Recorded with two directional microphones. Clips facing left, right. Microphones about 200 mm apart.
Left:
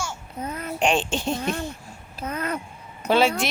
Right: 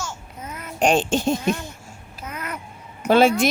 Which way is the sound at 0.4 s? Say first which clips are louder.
Left 5 dB; 30° left (ahead or behind).